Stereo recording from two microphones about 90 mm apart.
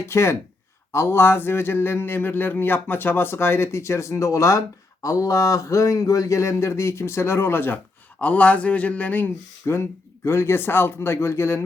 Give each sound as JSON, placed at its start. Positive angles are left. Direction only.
{"t": 0.0, "sound": "speech", "side_deg": 30}
{"t": 9.6, "sound": "speech", "side_deg": 30}